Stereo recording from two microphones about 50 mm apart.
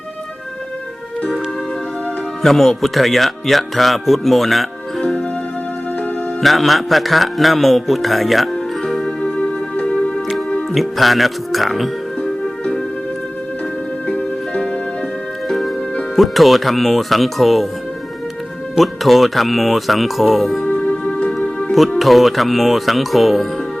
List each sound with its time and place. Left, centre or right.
2.4 s speech: centre
6.4 s speech: centre
8.8 s music: centre
10.8 s speech: centre
12.2 s music: centre
14.1 s music: left
15.4 s music: centre
16.1 s speech: centre
18.8 s speech: centre
20.7 s music: left
21.9 s speech: centre